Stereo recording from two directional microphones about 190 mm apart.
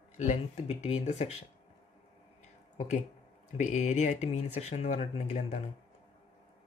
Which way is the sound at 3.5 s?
40° left (ahead or behind).